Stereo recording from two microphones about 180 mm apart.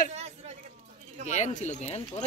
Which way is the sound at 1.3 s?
40° left (ahead or behind).